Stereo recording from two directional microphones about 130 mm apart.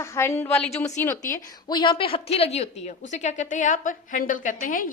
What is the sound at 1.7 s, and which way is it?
A woman's voice, 35° left (ahead or behind).